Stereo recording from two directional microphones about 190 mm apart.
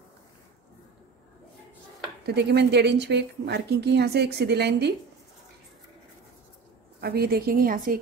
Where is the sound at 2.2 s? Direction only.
60° right (ahead or behind).